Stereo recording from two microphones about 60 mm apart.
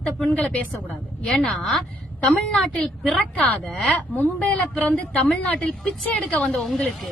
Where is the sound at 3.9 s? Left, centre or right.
Left.